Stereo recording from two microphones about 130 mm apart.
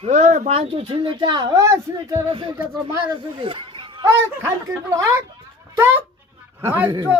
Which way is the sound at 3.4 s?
40° right (ahead or behind).